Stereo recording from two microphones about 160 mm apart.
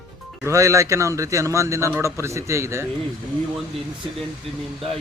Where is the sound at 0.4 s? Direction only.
20° right (ahead or behind).